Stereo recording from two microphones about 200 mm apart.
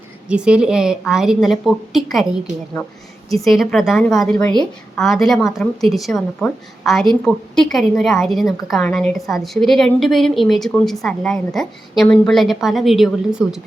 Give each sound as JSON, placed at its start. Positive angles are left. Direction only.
{"t": 0.3, "sound": "speech", "side_deg": -5}
{"t": 3.3, "sound": "speech", "side_deg": 0}